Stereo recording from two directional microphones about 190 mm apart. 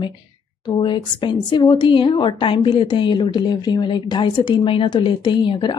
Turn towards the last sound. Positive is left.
turn(degrees=25)  # may be behind; listen again after turning